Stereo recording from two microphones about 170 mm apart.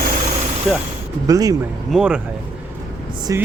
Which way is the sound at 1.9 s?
5° right (ahead or behind).